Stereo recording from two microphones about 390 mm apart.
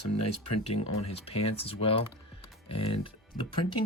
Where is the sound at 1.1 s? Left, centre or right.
Centre.